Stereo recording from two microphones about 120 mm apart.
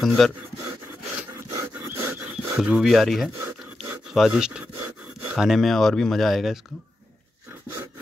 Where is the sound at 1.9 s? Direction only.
15° right (ahead or behind).